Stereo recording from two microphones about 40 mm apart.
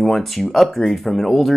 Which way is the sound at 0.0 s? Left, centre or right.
Centre.